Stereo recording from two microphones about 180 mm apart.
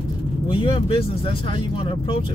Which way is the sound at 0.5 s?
30° left (ahead or behind).